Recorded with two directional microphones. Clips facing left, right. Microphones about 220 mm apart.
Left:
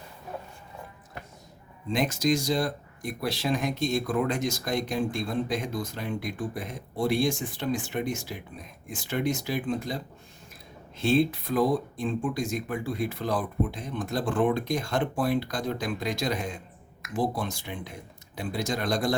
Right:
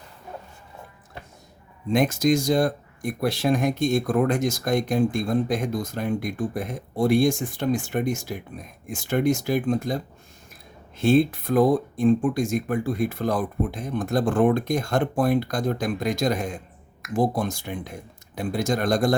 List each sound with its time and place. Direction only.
1.9 s speech: 50° right (ahead or behind)
11.0 s speech: 50° right (ahead or behind)